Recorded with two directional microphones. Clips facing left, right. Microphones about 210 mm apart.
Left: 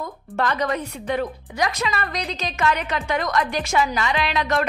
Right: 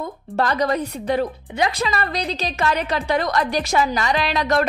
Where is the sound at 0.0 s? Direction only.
35° right (ahead or behind).